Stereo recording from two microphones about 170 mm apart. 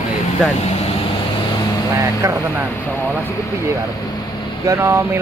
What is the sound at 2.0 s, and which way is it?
Speech, 15° right (ahead or behind).